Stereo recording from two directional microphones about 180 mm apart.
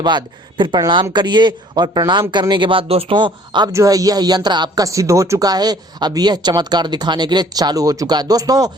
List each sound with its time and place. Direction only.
0.0 s speech: 25° right (ahead or behind)